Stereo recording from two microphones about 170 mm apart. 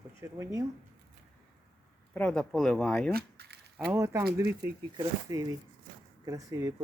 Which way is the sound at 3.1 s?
70° right (ahead or behind).